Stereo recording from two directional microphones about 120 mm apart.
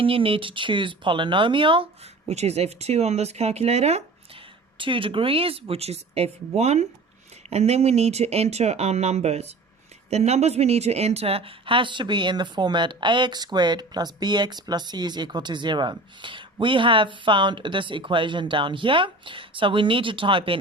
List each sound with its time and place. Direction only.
0.0 s speech: 50° right (ahead or behind)
2.2 s speech: 65° right (ahead or behind)
4.8 s speech: 45° right (ahead or behind)